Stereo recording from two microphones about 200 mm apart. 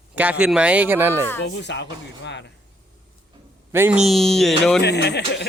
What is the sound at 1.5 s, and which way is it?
Speech, 60° left (ahead or behind).